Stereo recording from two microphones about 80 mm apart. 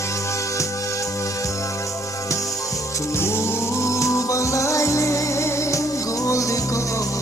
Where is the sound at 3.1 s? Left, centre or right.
Left.